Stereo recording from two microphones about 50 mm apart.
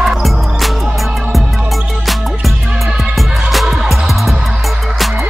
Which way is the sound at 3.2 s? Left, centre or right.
Centre.